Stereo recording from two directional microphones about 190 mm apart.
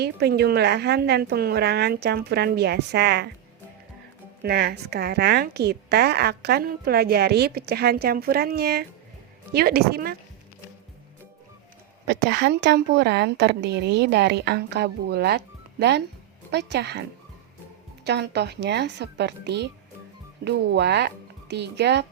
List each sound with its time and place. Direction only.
0.0 s a woman's voice: 60° right (ahead or behind)
4.4 s a woman's voice: 60° right (ahead or behind)
12.0 s a woman's voice: 65° right (ahead or behind)
18.0 s a woman's voice: 60° right (ahead or behind)